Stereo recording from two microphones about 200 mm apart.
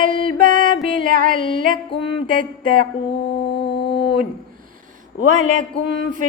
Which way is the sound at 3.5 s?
60° left (ahead or behind).